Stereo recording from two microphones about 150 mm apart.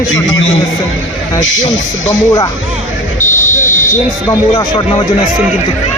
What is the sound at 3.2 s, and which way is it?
Buzzer, 55° left (ahead or behind).